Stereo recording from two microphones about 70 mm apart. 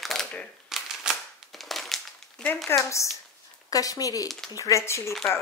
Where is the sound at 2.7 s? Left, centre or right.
Left.